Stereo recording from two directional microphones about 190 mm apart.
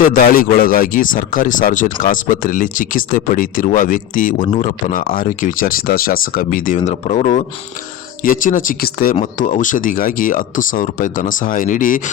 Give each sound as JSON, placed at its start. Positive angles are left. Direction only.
{"t": 0.0, "sound": "speech", "side_deg": 45}